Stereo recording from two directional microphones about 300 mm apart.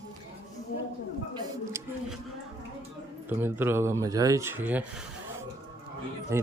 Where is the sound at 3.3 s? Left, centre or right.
Centre.